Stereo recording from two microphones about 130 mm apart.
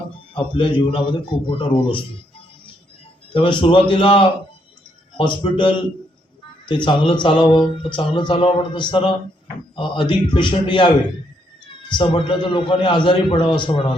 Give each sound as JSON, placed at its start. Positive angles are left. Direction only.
{"t": 0.5, "sound": "a man's voice", "side_deg": 40}
{"t": 3.3, "sound": "a man's voice", "side_deg": 40}